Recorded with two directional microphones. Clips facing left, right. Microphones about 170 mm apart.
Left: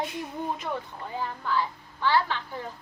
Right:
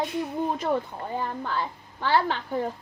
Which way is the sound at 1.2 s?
50° right (ahead or behind).